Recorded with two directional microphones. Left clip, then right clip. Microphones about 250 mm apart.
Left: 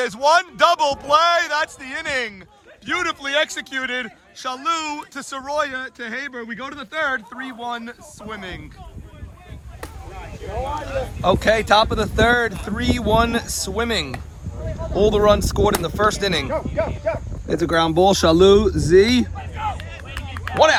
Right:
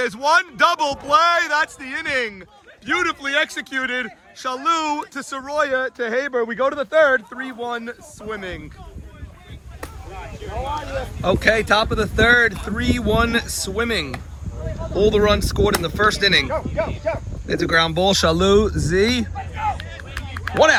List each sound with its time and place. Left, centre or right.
0.0 s speech: centre
11.2 s speech: centre
16.5 s speech: right
17.5 s speech: centre